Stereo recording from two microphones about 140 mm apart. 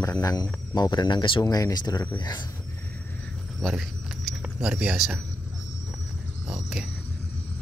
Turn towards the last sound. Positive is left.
turn(degrees=-5)  # may be behind; listen again after turning